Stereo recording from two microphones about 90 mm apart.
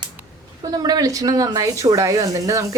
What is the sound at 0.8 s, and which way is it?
A woman's voice, 45° right (ahead or behind).